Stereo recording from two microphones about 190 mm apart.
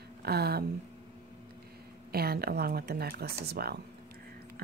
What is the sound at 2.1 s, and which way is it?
Speech, 55° right (ahead or behind).